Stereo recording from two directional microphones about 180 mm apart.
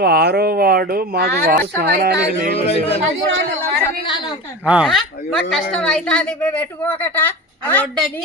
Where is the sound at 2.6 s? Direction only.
35° left (ahead or behind).